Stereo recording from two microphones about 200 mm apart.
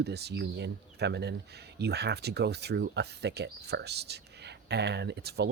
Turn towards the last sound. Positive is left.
turn(degrees=-55)  # may be behind; listen again after turning